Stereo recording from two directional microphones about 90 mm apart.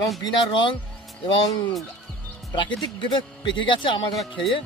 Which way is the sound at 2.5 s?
55° left (ahead or behind).